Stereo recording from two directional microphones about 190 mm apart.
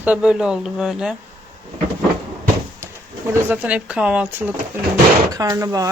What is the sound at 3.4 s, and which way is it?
Speech, 10° right (ahead or behind).